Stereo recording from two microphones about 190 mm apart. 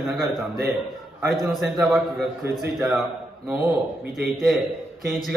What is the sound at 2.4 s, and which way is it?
Speech, 55° right (ahead or behind).